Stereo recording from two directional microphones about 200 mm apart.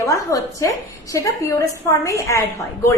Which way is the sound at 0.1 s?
15° left (ahead or behind).